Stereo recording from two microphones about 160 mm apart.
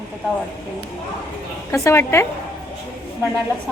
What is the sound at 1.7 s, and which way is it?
Speech, 15° left (ahead or behind).